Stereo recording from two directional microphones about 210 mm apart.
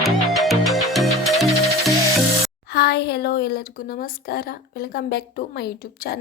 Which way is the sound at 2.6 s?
50° left (ahead or behind).